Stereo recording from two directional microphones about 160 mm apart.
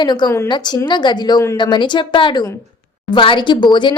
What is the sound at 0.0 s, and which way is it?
A woman's voice, 25° left (ahead or behind).